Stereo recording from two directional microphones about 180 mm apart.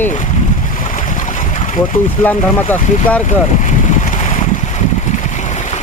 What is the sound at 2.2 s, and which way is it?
Speech, 10° left (ahead or behind).